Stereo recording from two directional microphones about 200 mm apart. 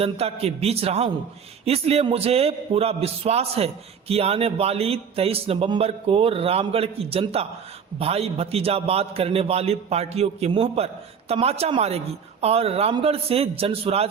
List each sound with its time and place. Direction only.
0.0 s a man's voice: 30° right (ahead or behind)